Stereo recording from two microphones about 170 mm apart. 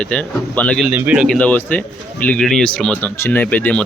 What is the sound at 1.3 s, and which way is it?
A man's voice, 10° left (ahead or behind).